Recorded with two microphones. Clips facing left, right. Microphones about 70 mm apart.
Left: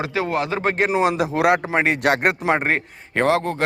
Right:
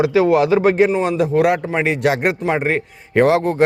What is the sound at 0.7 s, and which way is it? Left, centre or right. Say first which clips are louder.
Speech: right 5 dB; left.